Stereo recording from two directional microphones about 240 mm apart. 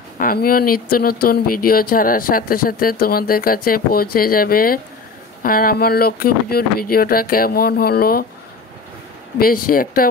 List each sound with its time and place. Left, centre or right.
0.2 s speech: left
9.4 s speech: left